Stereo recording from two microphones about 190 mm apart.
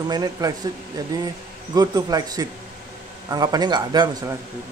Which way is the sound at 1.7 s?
20° right (ahead or behind).